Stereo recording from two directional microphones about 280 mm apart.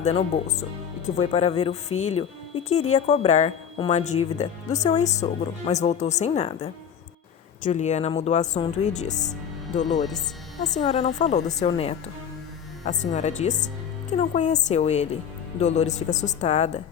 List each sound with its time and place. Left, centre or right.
0.0 s a woman's voice: left
10.6 s a woman's voice: left